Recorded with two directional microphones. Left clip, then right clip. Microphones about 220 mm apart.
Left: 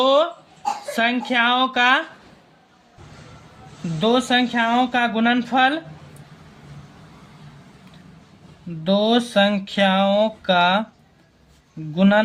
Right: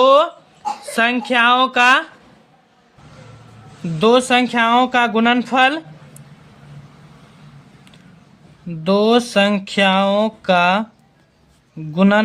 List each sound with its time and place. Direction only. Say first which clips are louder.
0.0 s a sound: right 5 dB; 30° right (ahead or behind)
0.9 s speech: right 5 dB; 30° right (ahead or behind)
4.0 s speech: right 5 dB; 30° right (ahead or behind)
8.8 s speech: right 4 dB; 30° right (ahead or behind)
11.9 s speech: right 2 dB; 30° right (ahead or behind)